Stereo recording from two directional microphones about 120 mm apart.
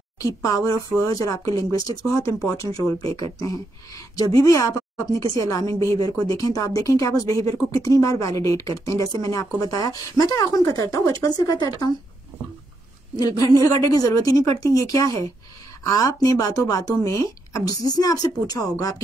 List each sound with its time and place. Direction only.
0.2 s speech: 30° left (ahead or behind)
13.2 s speech: 30° left (ahead or behind)